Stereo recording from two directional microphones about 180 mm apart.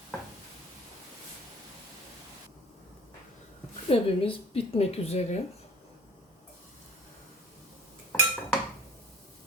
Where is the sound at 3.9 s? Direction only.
30° left (ahead or behind).